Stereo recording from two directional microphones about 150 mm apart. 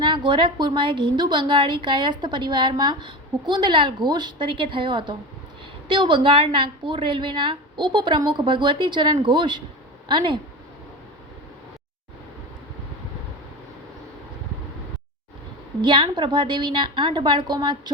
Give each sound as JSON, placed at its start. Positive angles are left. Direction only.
{"t": 0.0, "sound": "a woman's voice", "side_deg": -30}
{"t": 15.8, "sound": "a woman's voice", "side_deg": -30}